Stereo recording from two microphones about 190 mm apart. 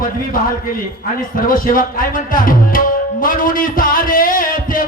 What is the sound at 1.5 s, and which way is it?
Music, 45° left (ahead or behind).